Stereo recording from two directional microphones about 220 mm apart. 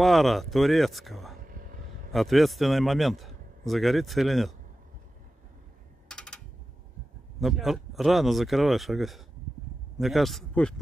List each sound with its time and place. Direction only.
0.0 s a man's voice: centre (ahead or behind)
1.4 s vehicle: 40° right (ahead or behind)
2.1 s a man's voice: centre (ahead or behind)
6.0 s typing: 5° left (ahead or behind)
7.3 s a man's voice: centre (ahead or behind)